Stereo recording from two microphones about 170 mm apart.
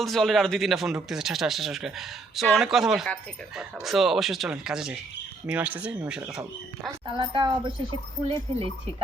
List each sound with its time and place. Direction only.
0.0 s speech: centre (ahead or behind)
7.1 s a woman's voice: 30° right (ahead or behind)